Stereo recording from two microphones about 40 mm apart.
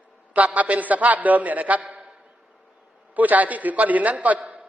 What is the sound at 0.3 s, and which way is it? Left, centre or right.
A man's voice, right.